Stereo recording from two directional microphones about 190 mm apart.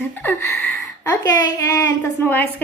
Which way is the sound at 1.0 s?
15° left (ahead or behind).